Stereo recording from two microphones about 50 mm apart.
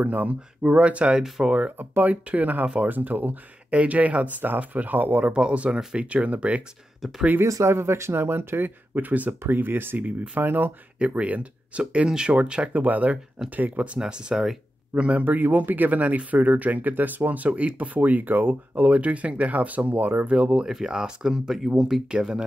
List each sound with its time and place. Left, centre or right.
0.0 s speech: right
0.6 s speech: right
1.8 s speech: right
5.3 s speech: right
7.0 s speech: centre
7.4 s speech: right
7.7 s speech: right
9.5 s speech: right
11.0 s speech: right
13.9 s speech: centre
15.2 s speech: right
20.2 s speech: right
20.6 s speech: centre